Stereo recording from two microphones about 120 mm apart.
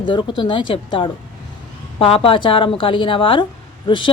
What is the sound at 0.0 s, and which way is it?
A woman's voice, 40° left (ahead or behind).